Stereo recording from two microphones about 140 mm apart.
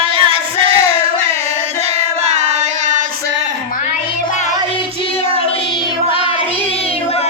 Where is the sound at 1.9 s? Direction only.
50° right (ahead or behind).